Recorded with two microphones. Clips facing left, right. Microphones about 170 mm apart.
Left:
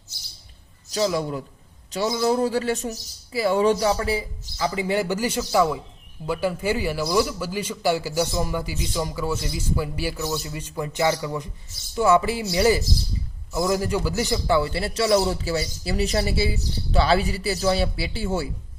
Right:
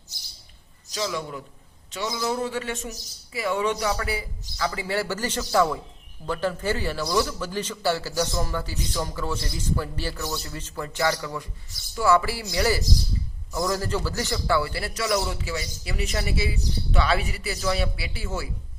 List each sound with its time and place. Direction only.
0.9 s a man's voice: 35° left (ahead or behind)